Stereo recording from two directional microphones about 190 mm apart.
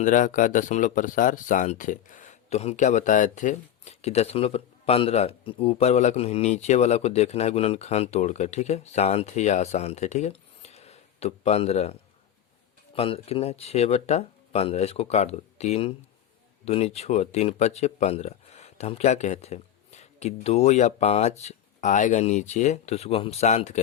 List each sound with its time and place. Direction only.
0.0 s speech: 40° left (ahead or behind)